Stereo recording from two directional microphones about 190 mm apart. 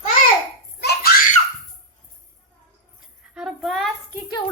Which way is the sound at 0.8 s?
60° left (ahead or behind).